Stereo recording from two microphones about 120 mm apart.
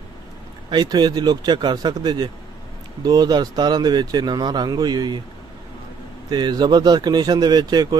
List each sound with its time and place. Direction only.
0.7 s speech: 40° right (ahead or behind)
6.3 s speech: 35° right (ahead or behind)